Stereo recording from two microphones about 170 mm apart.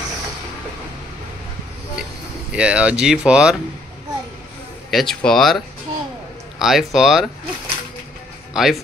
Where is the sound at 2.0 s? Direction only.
5° right (ahead or behind).